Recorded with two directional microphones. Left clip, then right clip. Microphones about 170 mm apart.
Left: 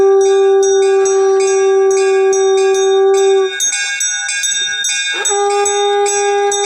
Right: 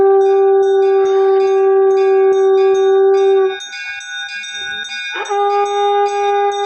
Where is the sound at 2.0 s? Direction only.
75° left (ahead or behind).